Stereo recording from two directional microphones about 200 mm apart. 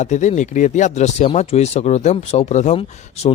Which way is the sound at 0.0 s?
35° left (ahead or behind).